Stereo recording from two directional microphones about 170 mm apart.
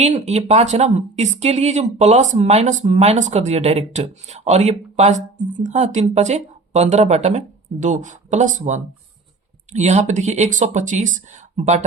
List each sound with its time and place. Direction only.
0.0 s speech: 40° right (ahead or behind)